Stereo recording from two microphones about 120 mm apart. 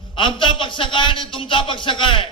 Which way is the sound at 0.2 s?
45° left (ahead or behind).